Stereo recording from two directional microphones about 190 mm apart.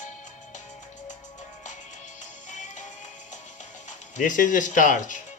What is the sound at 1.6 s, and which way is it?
Music, 40° left (ahead or behind).